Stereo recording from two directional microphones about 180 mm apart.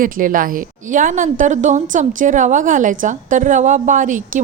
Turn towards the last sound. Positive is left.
turn(degrees=-45)  # may be behind; listen again after turning